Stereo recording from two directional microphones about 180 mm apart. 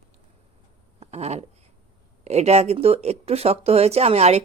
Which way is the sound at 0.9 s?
35° right (ahead or behind).